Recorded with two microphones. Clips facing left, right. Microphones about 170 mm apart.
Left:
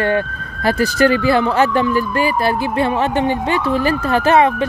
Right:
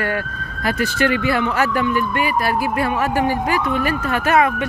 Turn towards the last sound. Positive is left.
turn(degrees=30)  # may be behind; listen again after turning